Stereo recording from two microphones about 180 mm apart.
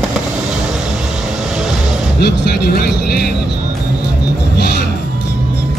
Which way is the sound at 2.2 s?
60° left (ahead or behind).